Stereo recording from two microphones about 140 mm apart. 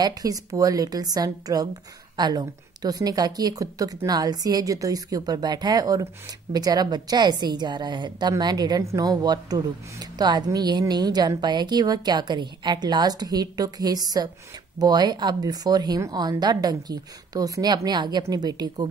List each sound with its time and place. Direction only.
0.0 s a woman's voice: 25° right (ahead or behind)